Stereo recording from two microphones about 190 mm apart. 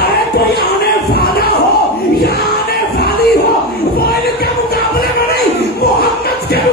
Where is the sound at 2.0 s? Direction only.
55° left (ahead or behind).